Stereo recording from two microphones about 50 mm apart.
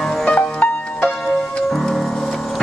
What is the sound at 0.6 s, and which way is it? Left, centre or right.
Music, left.